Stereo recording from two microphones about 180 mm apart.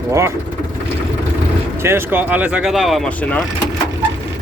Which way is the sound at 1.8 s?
15° right (ahead or behind).